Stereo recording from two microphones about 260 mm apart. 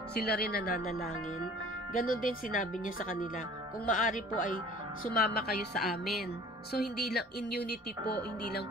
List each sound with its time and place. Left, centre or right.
0.1 s speech: left
2.0 s speech: left
5.8 s music: centre
6.7 s speech: left